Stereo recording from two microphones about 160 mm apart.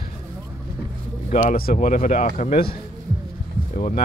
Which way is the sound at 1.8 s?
45° left (ahead or behind).